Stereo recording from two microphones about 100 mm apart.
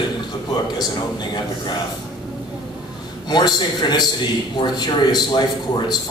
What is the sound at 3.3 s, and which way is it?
A man's voice, 45° left (ahead or behind).